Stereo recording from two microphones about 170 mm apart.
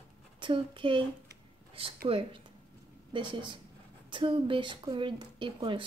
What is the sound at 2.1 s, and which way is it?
Speech, 35° right (ahead or behind).